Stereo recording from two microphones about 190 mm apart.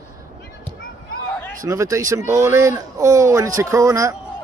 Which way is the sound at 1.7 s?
15° right (ahead or behind).